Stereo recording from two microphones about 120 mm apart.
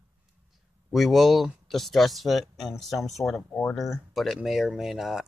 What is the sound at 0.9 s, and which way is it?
Speech, centre (ahead or behind).